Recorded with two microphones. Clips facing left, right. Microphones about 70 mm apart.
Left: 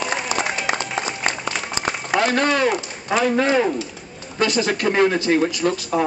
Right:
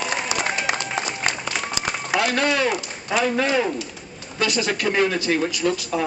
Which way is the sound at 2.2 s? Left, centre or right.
Left.